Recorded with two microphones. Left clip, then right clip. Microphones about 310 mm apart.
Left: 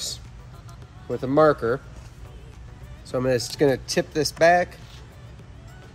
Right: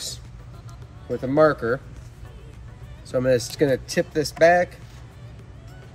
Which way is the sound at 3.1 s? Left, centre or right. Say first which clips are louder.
Right 3 dB; centre.